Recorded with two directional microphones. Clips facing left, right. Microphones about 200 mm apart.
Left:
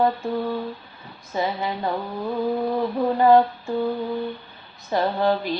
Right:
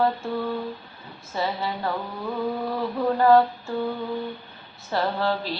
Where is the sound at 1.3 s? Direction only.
15° left (ahead or behind).